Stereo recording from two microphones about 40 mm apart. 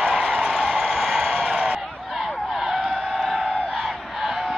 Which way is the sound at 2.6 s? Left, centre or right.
Centre.